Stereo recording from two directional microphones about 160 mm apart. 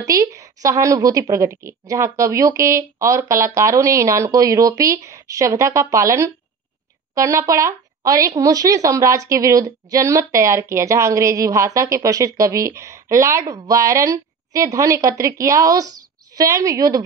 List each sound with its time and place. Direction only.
0.0 s a woman's voice: 20° right (ahead or behind)